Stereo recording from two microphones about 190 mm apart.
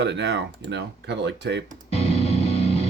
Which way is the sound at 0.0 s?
65° right (ahead or behind).